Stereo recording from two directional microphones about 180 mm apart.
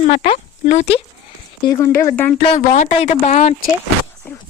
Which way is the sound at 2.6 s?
45° left (ahead or behind).